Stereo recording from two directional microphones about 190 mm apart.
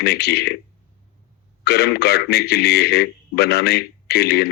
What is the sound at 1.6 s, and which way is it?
A man's voice, 60° left (ahead or behind).